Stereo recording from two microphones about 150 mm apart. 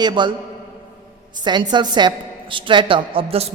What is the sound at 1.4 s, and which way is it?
A woman's voice, 30° right (ahead or behind).